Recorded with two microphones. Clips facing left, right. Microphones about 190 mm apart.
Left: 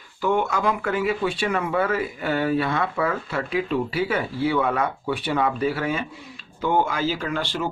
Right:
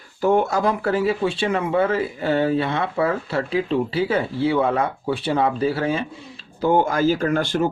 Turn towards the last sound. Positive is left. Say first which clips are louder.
# right 6 dB
turn(degrees=-50)  # may be behind; listen again after turning